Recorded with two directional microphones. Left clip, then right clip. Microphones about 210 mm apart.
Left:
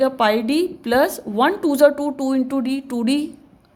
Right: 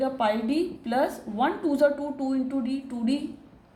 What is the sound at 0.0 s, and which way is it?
Speech, 50° left (ahead or behind).